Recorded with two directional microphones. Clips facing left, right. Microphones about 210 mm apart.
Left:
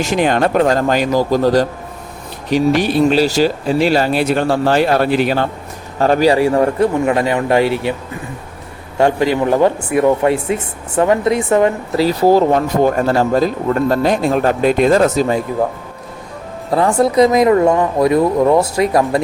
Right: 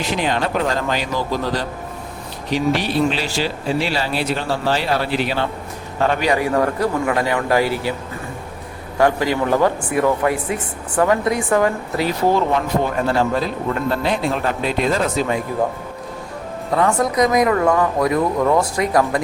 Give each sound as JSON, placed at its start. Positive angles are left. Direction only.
{"t": 0.0, "sound": "speech", "side_deg": 50}
{"t": 6.0, "sound": "speech", "side_deg": 35}
{"t": 9.0, "sound": "speech", "side_deg": 25}
{"t": 12.0, "sound": "speech", "side_deg": 35}
{"t": 16.7, "sound": "speech", "side_deg": 30}